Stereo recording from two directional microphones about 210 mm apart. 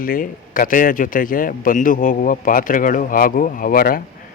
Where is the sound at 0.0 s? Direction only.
40° left (ahead or behind).